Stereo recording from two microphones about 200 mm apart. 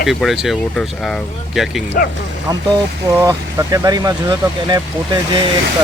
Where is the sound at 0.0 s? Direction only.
Centre (ahead or behind).